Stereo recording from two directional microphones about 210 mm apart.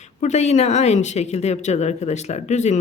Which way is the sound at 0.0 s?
35° left (ahead or behind).